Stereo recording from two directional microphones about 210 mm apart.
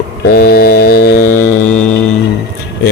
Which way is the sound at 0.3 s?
45° left (ahead or behind).